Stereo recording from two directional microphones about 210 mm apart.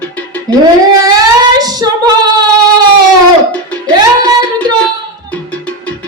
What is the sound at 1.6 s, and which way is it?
Female singing, 20° right (ahead or behind).